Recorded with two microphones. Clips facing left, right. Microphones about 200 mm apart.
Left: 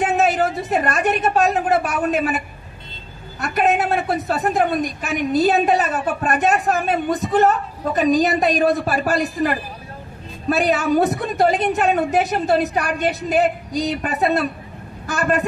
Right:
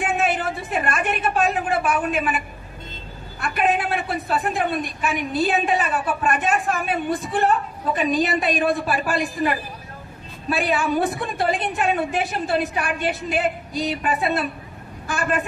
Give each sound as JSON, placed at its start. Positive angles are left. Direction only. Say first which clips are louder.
{"t": 0.0, "sound": "a woman's voice", "louder": "left 5 dB", "side_deg": 40}